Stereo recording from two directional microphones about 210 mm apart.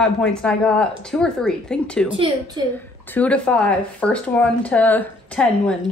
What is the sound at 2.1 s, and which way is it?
Speech, 20° right (ahead or behind).